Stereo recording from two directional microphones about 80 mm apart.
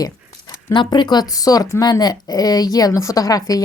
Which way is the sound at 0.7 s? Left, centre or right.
Left.